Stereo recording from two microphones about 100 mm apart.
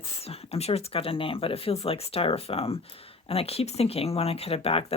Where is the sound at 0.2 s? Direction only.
90° left.